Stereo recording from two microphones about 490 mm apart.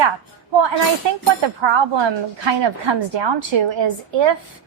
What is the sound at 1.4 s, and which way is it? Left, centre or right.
Speech, right.